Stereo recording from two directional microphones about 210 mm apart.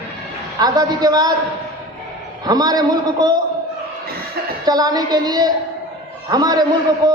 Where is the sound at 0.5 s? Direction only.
20° right (ahead or behind).